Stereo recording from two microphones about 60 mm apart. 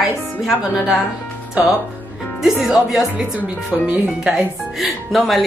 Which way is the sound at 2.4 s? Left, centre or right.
Centre.